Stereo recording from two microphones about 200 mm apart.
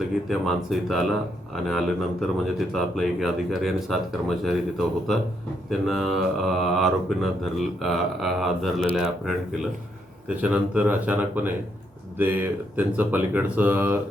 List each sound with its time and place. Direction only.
0.3 s speech: centre (ahead or behind)